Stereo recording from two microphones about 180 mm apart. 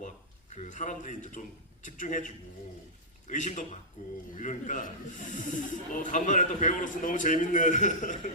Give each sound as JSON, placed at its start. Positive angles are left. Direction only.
{"t": 0.5, "sound": "speech", "side_deg": 40}